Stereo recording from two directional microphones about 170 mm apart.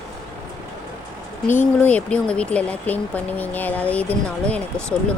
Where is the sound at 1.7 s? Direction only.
10° left (ahead or behind).